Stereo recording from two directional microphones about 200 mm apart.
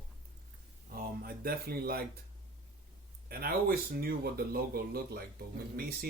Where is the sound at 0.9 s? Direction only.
50° right (ahead or behind).